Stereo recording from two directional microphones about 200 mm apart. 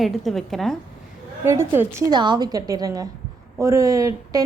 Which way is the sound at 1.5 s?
10° right (ahead or behind).